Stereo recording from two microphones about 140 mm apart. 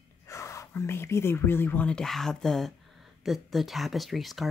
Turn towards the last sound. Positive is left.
turn(degrees=0)  # may be behind; listen again after turning